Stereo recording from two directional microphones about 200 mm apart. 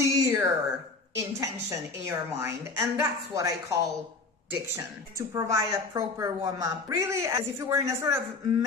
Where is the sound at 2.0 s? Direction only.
15° right (ahead or behind).